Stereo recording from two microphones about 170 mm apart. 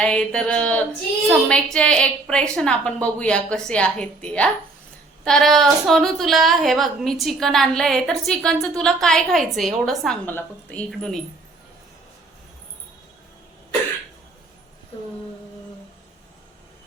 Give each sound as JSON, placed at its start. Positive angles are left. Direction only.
{"t": 0.0, "sound": "a woman's voice", "side_deg": 5}